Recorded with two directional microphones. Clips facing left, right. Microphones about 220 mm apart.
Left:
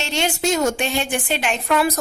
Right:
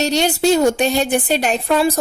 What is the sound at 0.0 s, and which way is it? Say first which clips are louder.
A woman's voice: right 6 dB; 40° right (ahead or behind).